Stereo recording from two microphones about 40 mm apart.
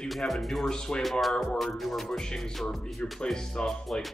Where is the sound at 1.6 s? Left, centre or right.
Centre.